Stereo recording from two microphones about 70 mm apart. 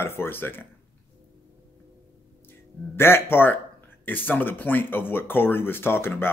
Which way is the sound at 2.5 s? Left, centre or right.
Left.